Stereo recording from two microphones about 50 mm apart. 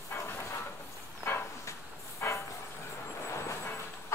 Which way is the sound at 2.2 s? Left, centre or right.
Left.